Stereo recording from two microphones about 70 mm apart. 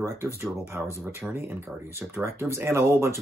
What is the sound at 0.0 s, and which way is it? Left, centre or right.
Speech, right.